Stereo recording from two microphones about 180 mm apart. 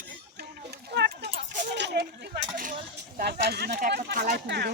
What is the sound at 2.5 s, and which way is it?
Speech, 50° right (ahead or behind).